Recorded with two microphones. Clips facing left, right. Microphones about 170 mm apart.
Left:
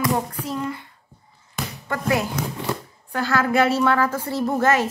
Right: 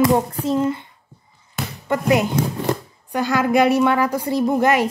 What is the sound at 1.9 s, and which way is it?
A child's voice, 20° right (ahead or behind).